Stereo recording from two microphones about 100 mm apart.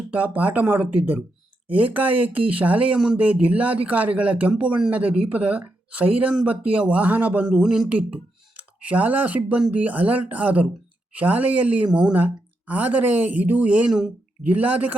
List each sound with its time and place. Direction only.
0.1 s a man's voice: 15° right (ahead or behind)